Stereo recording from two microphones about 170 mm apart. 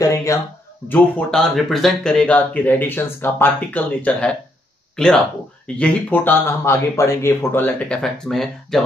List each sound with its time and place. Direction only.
0.0 s speech: 20° left (ahead or behind)
0.8 s speech: 5° left (ahead or behind)